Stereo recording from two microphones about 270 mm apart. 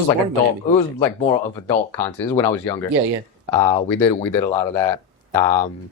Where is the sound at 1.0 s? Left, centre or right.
Centre.